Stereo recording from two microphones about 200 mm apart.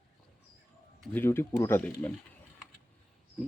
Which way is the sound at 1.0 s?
10° left (ahead or behind).